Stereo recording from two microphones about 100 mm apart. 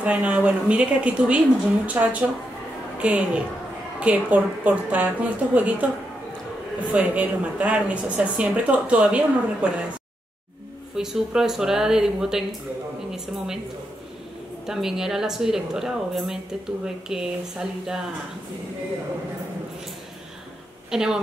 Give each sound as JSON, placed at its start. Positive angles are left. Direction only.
{"t": 0.0, "sound": "a woman's voice", "side_deg": -15}
{"t": 6.9, "sound": "a woman's voice", "side_deg": -15}
{"t": 11.0, "sound": "speech", "side_deg": -5}
{"t": 14.7, "sound": "speech", "side_deg": -5}
{"t": 20.9, "sound": "speech", "side_deg": -5}